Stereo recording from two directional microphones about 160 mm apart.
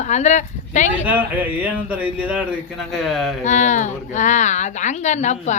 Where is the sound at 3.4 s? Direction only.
50° left (ahead or behind).